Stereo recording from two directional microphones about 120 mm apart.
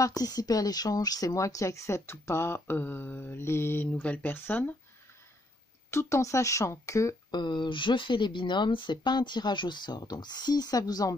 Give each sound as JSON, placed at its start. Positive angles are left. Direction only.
{"t": 0.0, "sound": "speech", "side_deg": 30}
{"t": 5.9, "sound": "speech", "side_deg": 20}
{"t": 7.3, "sound": "speech", "side_deg": 40}